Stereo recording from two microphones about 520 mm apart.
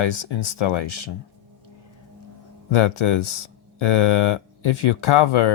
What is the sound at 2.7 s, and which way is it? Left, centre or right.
Speech, left.